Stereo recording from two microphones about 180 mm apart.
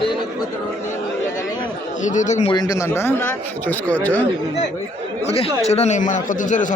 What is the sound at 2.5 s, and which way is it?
A man's voice, 20° left (ahead or behind).